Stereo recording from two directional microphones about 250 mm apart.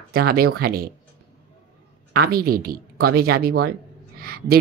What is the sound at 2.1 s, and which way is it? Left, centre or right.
Speech, right.